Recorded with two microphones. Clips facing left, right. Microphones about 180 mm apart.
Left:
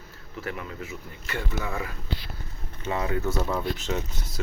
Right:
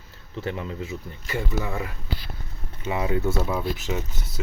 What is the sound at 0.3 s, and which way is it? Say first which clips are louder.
Speech: right 4 dB; 25° right (ahead or behind).